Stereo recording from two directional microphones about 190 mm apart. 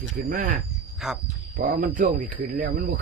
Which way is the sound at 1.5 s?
45° right (ahead or behind).